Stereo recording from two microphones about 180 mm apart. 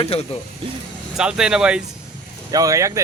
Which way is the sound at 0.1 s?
35° left (ahead or behind).